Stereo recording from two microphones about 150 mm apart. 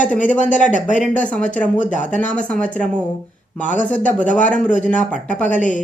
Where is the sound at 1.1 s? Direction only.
10° left (ahead or behind).